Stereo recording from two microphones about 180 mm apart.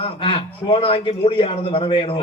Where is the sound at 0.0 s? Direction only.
30° left (ahead or behind).